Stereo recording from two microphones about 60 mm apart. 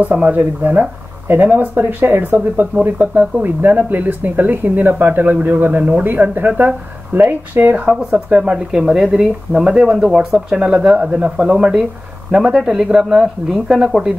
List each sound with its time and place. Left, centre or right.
0.0 s speech: right
7.9 s speech: centre